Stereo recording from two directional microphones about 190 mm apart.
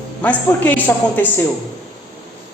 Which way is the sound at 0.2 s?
10° left (ahead or behind).